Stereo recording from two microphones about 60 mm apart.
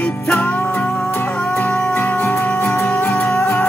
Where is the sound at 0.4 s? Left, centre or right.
Left.